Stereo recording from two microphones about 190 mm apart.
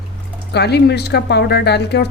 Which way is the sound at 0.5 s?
60° left (ahead or behind).